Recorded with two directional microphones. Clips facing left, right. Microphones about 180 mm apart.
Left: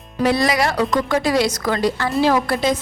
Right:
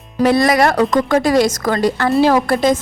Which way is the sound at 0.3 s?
55° right (ahead or behind).